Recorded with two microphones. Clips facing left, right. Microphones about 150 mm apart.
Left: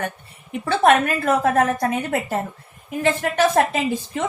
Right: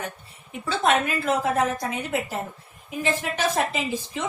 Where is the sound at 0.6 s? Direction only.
60° left (ahead or behind).